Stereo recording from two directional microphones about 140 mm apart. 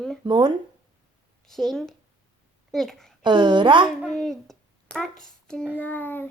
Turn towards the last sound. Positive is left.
turn(degrees=15)  # may be behind; listen again after turning